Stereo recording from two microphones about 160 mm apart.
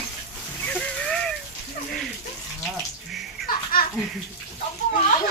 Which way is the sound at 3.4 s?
65° left (ahead or behind).